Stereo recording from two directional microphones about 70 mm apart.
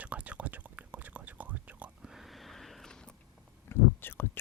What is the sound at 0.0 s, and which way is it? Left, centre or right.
Whispering, right.